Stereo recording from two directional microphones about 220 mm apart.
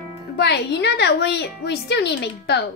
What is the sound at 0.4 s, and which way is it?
A woman's voice, 50° left (ahead or behind).